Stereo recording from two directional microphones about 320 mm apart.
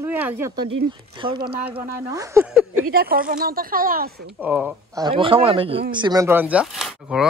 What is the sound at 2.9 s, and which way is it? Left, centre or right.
A woman's voice, right.